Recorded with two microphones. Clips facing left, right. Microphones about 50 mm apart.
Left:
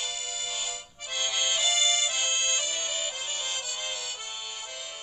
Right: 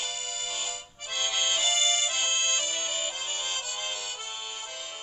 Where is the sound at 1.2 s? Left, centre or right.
Right.